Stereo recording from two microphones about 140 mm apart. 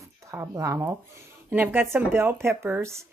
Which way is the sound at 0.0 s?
20° right (ahead or behind).